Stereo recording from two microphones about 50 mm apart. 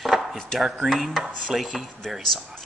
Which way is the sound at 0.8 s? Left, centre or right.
Centre.